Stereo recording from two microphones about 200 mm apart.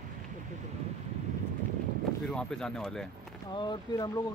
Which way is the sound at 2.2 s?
5° left (ahead or behind).